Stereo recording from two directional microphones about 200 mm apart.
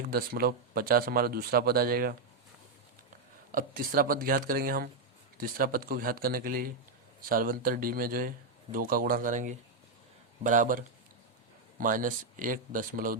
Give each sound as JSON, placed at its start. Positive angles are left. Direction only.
{"t": 0.1, "sound": "speech", "side_deg": -50}
{"t": 3.5, "sound": "speech", "side_deg": -45}